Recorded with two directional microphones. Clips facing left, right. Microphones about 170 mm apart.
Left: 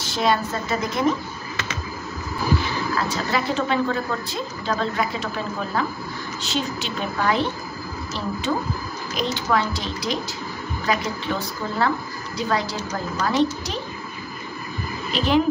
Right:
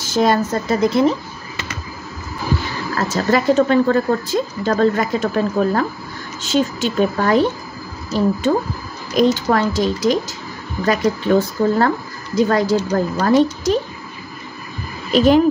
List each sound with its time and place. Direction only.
0.0 s a woman's voice: 45° right (ahead or behind)
3.0 s a woman's voice: 45° right (ahead or behind)
15.1 s a woman's voice: 45° right (ahead or behind)